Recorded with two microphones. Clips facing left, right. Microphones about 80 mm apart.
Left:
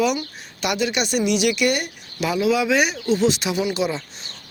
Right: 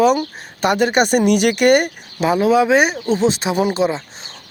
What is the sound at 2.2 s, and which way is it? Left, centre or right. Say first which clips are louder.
Speech: right 6 dB; right.